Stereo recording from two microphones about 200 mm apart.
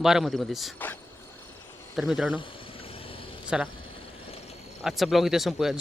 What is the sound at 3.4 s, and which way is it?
Speech, 5° right (ahead or behind).